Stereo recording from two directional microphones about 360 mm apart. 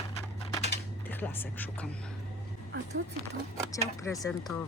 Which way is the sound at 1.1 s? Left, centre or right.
Centre.